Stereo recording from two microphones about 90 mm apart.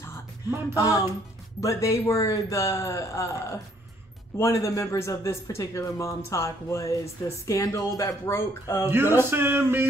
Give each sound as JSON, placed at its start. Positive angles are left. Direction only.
{"t": 1.6, "sound": "a man's voice", "side_deg": 35}
{"t": 8.8, "sound": "male singing", "side_deg": -25}